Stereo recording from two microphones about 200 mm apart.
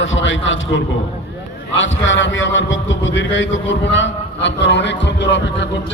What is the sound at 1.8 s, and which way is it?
A man's voice, 70° left (ahead or behind).